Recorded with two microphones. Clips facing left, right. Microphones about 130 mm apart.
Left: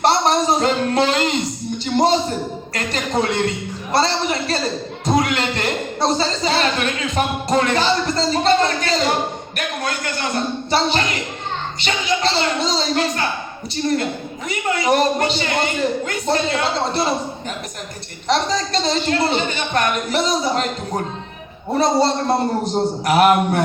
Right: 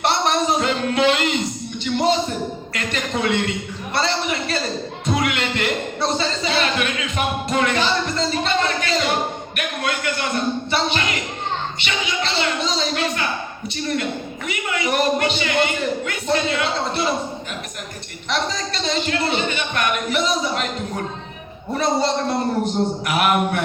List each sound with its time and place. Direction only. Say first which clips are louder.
0.0 s a sound: left 3 dB; 35° left (ahead or behind)
2.7 s a man's voice: left 5 dB; 35° left (ahead or behind)
18.3 s speech: left 5 dB; 35° left (ahead or behind)